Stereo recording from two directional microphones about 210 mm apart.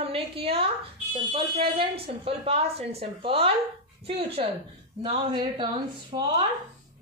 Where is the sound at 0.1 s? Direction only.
25° right (ahead or behind).